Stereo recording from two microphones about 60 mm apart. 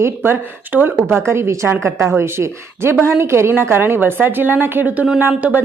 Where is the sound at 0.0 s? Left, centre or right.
Right.